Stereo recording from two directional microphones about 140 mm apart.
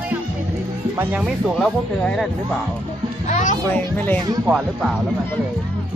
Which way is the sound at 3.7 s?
15° left (ahead or behind).